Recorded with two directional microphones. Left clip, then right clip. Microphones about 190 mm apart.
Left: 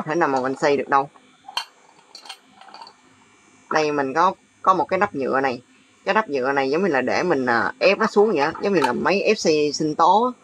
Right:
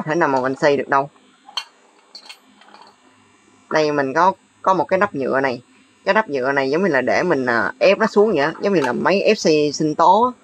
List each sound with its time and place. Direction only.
0.0 s speech: 15° right (ahead or behind)
3.7 s speech: 15° right (ahead or behind)